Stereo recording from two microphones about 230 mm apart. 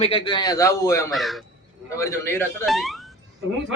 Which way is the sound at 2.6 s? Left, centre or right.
Centre.